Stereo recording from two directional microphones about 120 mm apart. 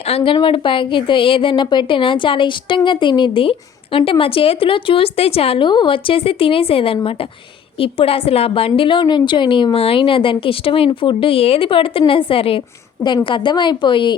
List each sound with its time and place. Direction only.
0.0 s a woman's voice: 55° left (ahead or behind)
0.3 s a woman's voice: 45° left (ahead or behind)
13.0 s a woman's voice: 40° left (ahead or behind)